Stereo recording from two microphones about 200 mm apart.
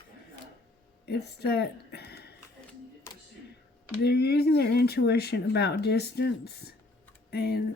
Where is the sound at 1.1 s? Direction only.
55° left (ahead or behind).